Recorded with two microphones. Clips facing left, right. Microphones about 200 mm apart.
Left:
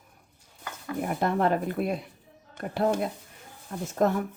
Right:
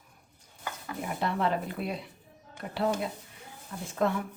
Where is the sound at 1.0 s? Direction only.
50° left (ahead or behind).